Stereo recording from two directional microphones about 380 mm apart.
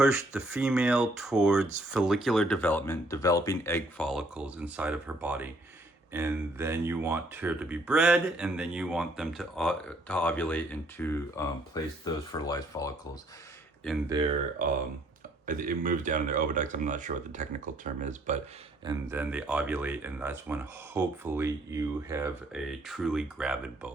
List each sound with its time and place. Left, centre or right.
0.0 s speech: centre
14.1 s speech: centre
18.9 s speech: centre